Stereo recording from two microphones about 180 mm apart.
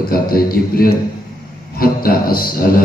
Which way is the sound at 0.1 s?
55° left (ahead or behind).